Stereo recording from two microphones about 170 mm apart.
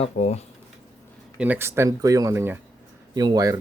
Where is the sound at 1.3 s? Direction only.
10° right (ahead or behind).